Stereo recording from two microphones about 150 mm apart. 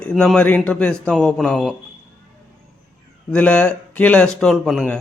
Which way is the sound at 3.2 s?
10° left (ahead or behind).